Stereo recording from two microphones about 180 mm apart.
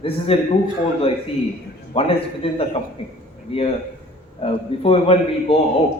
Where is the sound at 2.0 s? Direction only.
30° left (ahead or behind).